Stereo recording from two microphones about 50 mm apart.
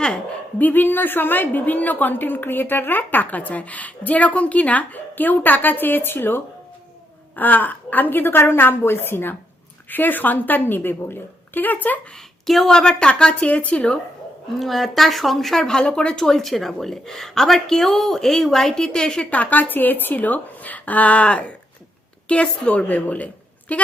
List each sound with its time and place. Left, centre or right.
0.6 s a woman's voice: left
9.9 s a woman's voice: left
12.1 s speech: centre
14.6 s speech: centre
19.3 s a woman's voice: left